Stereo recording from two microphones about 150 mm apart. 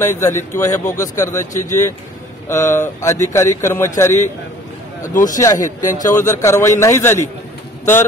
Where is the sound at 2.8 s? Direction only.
20° left (ahead or behind).